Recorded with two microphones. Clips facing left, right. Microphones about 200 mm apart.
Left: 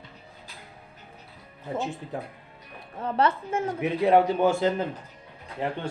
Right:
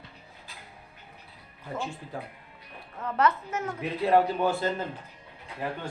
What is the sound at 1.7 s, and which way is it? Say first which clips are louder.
Speech: left 4 dB; 20° left (ahead or behind).